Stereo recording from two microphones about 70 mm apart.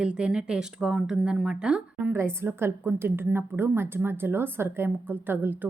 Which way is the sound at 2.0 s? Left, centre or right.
Right.